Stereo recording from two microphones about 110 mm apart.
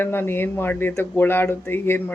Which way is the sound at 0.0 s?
20° left (ahead or behind).